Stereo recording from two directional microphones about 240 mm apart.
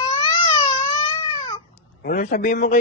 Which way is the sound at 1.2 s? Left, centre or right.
Left.